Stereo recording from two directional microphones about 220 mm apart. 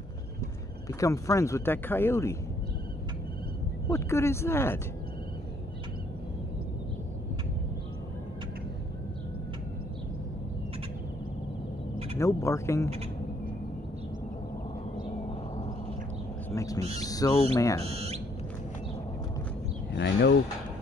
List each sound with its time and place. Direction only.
0.8 s speech: 15° left (ahead or behind)
3.8 s speech: 10° left (ahead or behind)
12.2 s speech: 15° left (ahead or behind)
16.4 s bird: 15° left (ahead or behind)
17.0 s speech: 15° left (ahead or behind)
17.8 s speech: 30° right (ahead or behind)
19.9 s speech: 50° left (ahead or behind)